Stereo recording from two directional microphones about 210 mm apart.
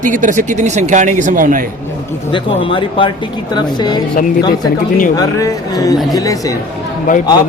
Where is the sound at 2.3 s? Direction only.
25° left (ahead or behind).